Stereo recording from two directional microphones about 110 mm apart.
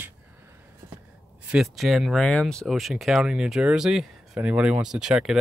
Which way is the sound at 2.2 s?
10° left (ahead or behind).